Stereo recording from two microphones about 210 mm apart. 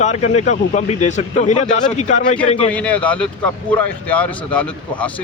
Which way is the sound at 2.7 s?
5° left (ahead or behind).